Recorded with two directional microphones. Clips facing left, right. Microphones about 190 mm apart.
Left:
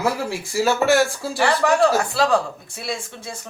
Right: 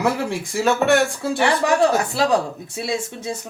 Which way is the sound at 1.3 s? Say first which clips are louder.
Even; 20° right (ahead or behind).